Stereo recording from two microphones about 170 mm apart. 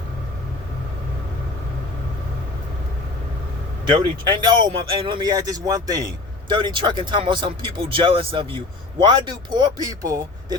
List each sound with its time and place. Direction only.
4.3 s speech: 25° right (ahead or behind)